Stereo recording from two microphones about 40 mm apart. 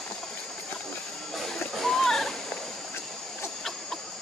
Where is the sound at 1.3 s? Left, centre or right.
Centre.